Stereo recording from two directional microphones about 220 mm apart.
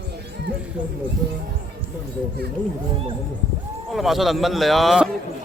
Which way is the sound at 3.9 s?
Centre (ahead or behind).